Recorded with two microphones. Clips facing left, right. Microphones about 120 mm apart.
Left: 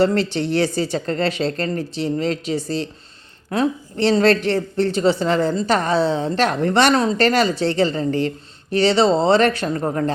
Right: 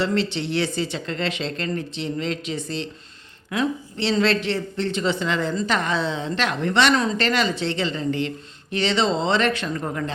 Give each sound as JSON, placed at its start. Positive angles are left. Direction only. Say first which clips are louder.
{"t": 0.0, "sound": "a woman's voice", "louder": "left 5 dB", "side_deg": 45}